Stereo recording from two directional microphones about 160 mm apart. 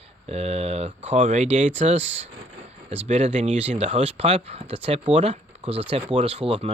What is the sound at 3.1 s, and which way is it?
Speech, 50° right (ahead or behind).